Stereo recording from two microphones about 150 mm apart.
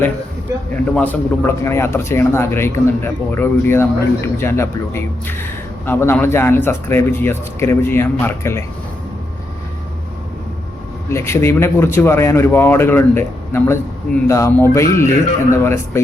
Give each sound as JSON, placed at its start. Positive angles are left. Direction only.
{"t": 0.9, "sound": "a man's voice", "side_deg": 10}
{"t": 11.1, "sound": "a man's voice", "side_deg": 15}